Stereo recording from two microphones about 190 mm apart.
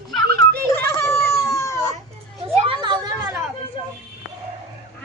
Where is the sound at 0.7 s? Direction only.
10° left (ahead or behind).